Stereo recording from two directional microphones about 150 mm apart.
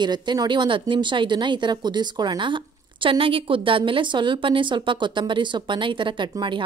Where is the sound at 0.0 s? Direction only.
30° right (ahead or behind).